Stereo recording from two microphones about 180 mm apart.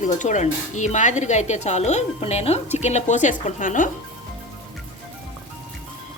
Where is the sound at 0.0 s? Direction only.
40° left (ahead or behind).